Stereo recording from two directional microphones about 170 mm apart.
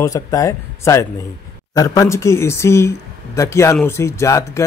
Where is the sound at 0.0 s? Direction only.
20° left (ahead or behind).